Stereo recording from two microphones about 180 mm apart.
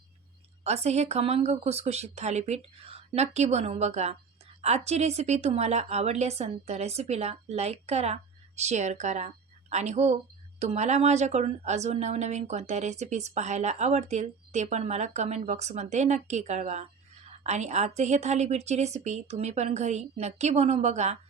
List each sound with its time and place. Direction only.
0.6 s a woman's voice: 35° right (ahead or behind)